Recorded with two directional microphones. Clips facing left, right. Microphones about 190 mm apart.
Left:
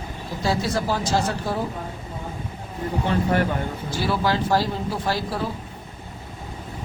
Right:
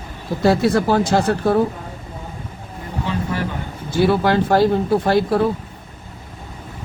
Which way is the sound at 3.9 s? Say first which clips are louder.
Right 8 dB; 55° right (ahead or behind).